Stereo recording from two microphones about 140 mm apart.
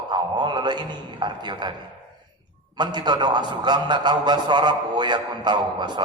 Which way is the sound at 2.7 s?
30° right (ahead or behind).